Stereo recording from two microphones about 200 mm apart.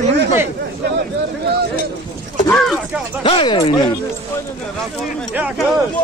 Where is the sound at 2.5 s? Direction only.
Centre (ahead or behind).